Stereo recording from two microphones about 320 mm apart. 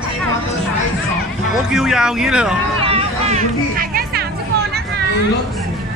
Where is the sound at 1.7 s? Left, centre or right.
Centre.